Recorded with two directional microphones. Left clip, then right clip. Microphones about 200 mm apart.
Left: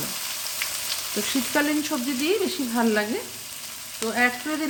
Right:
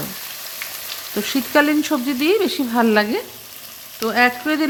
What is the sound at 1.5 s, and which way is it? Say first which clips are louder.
Speech: right 9 dB; 35° right (ahead or behind).